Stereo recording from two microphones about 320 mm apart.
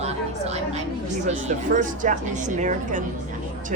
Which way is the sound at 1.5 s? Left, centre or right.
Right.